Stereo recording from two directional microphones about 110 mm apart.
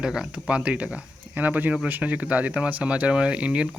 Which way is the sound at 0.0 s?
5° right (ahead or behind).